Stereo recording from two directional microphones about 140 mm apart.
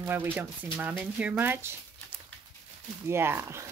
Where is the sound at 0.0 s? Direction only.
15° right (ahead or behind).